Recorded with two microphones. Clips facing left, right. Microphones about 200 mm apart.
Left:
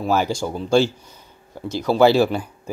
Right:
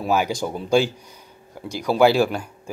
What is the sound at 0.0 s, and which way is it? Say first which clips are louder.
Speech: left 1 dB; 5° right (ahead or behind).